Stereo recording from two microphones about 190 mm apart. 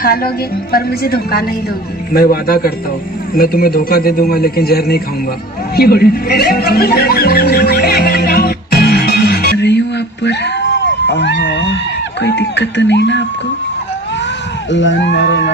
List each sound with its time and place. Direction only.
0.0 s a man's voice: 50° left (ahead or behind)
5.7 s music: 55° left (ahead or behind)
10.2 s cat: 65° left (ahead or behind)
12.2 s speech: 65° left (ahead or behind)
14.7 s speech: 70° left (ahead or behind)